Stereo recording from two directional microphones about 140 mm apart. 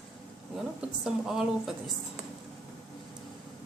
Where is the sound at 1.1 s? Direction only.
5° right (ahead or behind).